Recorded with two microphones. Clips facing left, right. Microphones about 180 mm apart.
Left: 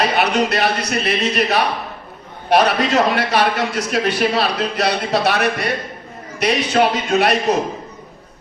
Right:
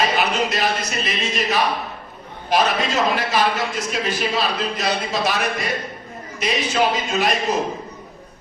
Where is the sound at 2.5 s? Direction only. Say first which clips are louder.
Left 5 dB; 65° left (ahead or behind).